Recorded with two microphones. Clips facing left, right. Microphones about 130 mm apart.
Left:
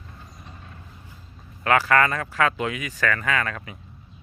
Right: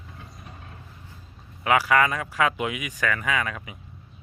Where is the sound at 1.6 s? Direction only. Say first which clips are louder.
Left 1 dB; 10° right (ahead or behind).